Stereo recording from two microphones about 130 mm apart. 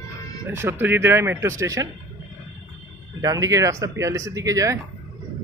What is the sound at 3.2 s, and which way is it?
Speech, 25° right (ahead or behind).